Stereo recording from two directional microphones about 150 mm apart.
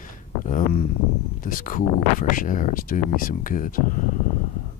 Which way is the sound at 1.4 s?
65° left (ahead or behind).